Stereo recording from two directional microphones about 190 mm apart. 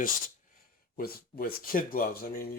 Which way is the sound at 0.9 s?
50° left (ahead or behind).